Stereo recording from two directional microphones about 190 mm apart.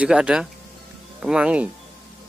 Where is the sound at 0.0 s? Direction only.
5° right (ahead or behind).